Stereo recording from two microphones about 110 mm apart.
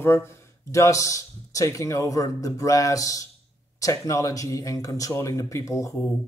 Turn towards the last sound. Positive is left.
turn(degrees=30)  # may be behind; listen again after turning